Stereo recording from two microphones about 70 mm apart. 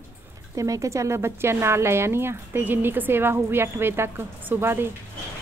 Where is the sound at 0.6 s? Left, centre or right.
Right.